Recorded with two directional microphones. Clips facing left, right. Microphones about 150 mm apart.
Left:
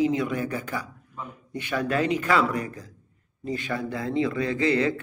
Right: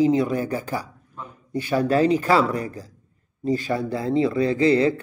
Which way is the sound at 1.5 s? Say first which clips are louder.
Right 6 dB; 35° right (ahead or behind).